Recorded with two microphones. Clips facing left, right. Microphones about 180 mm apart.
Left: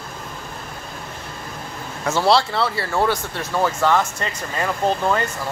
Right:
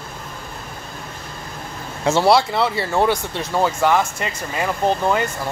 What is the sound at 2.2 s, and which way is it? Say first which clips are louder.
Speech: even; 15° right (ahead or behind).